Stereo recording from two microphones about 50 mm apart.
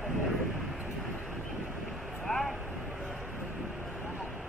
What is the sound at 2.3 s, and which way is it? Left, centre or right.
Vehicle, centre.